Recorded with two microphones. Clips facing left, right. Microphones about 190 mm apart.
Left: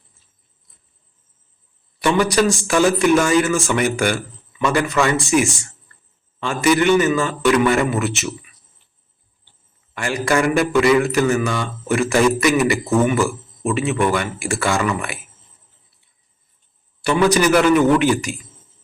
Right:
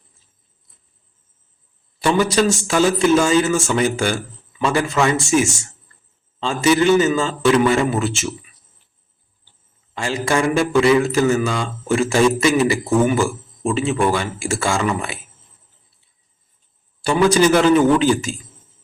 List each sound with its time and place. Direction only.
2.0 s a man's voice: 25° right (ahead or behind)
9.9 s a man's voice: 25° right (ahead or behind)
17.0 s a man's voice: 25° right (ahead or behind)